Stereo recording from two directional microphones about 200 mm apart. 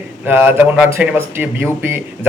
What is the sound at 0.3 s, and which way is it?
Speech, 10° right (ahead or behind).